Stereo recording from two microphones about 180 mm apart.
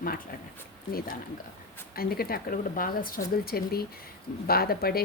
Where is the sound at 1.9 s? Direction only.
55° left (ahead or behind).